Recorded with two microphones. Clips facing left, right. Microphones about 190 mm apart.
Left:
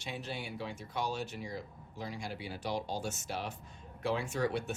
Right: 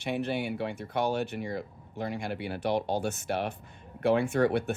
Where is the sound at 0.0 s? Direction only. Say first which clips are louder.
Right 10 dB; 60° right (ahead or behind).